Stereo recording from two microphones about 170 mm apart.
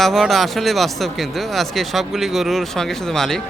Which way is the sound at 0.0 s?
Centre (ahead or behind).